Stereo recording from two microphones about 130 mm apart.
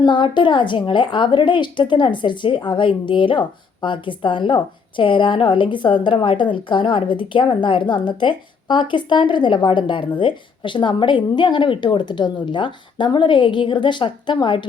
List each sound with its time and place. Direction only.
0.0 s a woman's voice: 40° left (ahead or behind)